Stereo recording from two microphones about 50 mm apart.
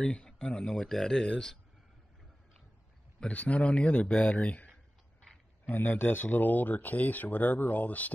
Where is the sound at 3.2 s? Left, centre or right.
Left.